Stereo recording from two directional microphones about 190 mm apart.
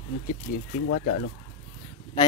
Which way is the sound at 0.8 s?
60° left (ahead or behind).